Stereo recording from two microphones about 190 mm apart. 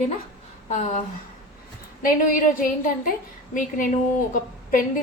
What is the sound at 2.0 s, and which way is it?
Speech, 45° left (ahead or behind).